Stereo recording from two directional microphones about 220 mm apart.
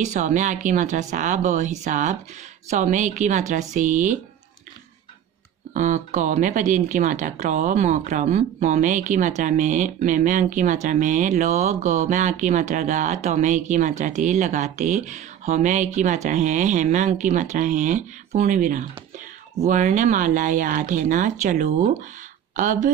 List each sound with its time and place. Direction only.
0.0 s speech: 35° right (ahead or behind)
5.7 s speech: 35° right (ahead or behind)